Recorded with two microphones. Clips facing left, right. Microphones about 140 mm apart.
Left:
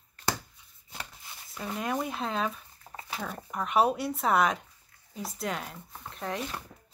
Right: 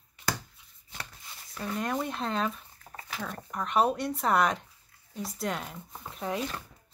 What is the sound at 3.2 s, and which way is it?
Speech, 5° left (ahead or behind).